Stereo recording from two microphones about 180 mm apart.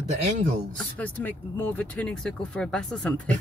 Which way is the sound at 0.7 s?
10° left (ahead or behind).